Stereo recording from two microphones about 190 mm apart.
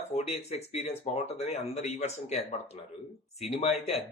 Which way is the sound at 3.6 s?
35° left (ahead or behind).